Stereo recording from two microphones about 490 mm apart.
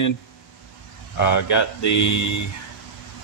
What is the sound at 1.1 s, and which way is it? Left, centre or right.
Speech, left.